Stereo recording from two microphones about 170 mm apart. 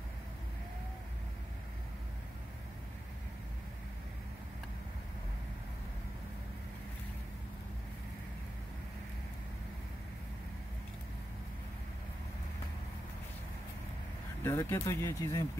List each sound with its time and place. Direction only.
14.4 s speech: 15° left (ahead or behind)